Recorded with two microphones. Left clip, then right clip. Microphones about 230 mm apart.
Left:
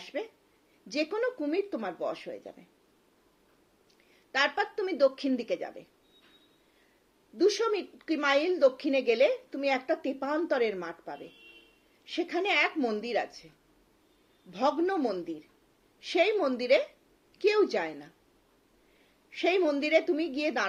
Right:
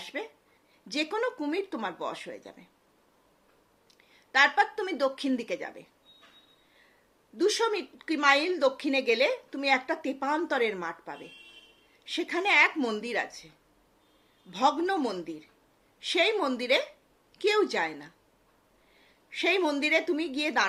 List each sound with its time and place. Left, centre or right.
0.0 s a sound: centre
0.9 s a woman's voice: centre
4.1 s speech: centre
7.3 s a woman's voice: centre
14.5 s a woman's voice: centre
19.3 s a woman's voice: centre